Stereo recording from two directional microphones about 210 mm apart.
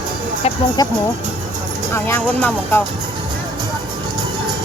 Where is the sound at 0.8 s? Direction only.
15° left (ahead or behind).